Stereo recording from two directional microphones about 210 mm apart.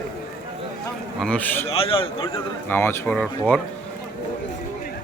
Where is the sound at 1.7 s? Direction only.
25° left (ahead or behind).